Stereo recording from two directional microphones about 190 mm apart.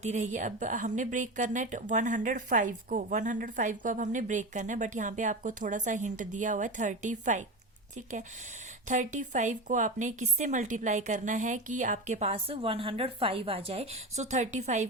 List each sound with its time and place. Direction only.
0.0 s speech: 35° right (ahead or behind)
8.9 s speech: 40° right (ahead or behind)